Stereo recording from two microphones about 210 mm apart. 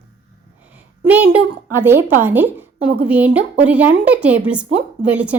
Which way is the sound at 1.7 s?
10° right (ahead or behind).